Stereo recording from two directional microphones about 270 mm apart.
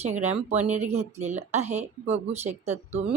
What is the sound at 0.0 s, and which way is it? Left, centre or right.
Speech, right.